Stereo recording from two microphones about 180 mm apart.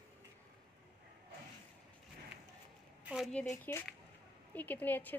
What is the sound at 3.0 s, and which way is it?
Speech, centre (ahead or behind).